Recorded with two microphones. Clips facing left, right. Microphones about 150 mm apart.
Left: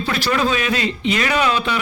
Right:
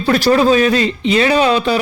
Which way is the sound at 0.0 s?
40° right (ahead or behind).